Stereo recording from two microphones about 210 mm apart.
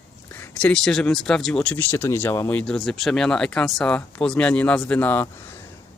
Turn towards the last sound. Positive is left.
turn(degrees=10)  # may be behind; listen again after turning